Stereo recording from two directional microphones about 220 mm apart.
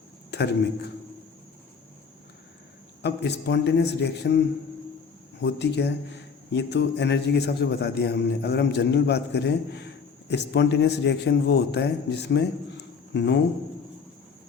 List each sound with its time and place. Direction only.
0.3 s a man's voice: 50° left (ahead or behind)
3.0 s a man's voice: 50° left (ahead or behind)